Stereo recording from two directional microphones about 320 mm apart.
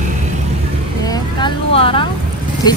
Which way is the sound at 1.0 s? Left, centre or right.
Centre.